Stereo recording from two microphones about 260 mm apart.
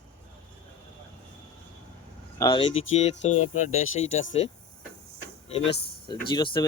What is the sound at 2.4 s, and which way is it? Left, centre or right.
Speech, centre.